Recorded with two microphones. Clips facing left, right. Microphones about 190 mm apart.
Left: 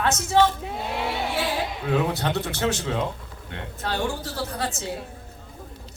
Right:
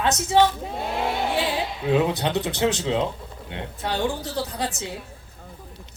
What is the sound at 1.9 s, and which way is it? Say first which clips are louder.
A woman's voice: right 3 dB; 20° right (ahead or behind).